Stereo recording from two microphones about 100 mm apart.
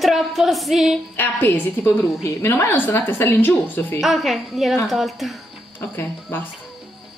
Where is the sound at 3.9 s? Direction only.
Centre (ahead or behind).